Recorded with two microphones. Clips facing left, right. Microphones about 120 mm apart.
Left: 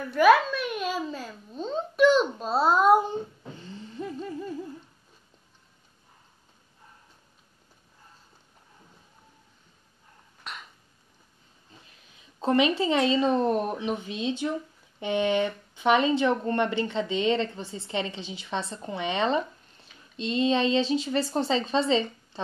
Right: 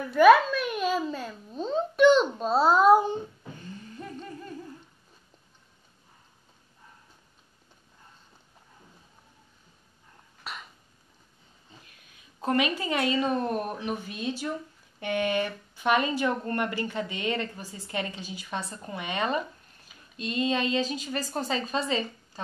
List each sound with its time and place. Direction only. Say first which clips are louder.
0.1 s a child's voice: right 2 dB; centre (ahead or behind)
3.6 s a sound: left 5 dB; 25° left (ahead or behind)
10.4 s cough: right 1 dB; 5° right (ahead or behind)
11.8 s speech: left 1 dB; 25° left (ahead or behind)